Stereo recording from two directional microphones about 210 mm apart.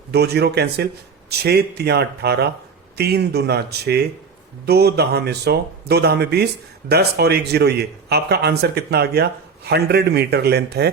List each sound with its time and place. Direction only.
0.1 s speech: 50° right (ahead or behind)